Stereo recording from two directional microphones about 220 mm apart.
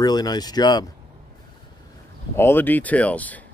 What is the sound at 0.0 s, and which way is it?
Speech, 20° left (ahead or behind).